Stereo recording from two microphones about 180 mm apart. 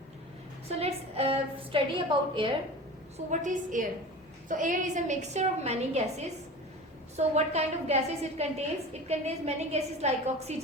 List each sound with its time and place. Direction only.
0.7 s a woman's voice: 35° right (ahead or behind)
3.2 s a woman's voice: 45° right (ahead or behind)